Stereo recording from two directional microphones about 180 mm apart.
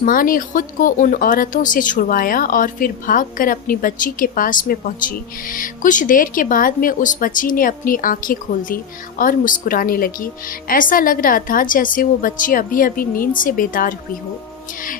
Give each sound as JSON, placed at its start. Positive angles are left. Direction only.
{"t": 0.0, "sound": "speech", "side_deg": 50}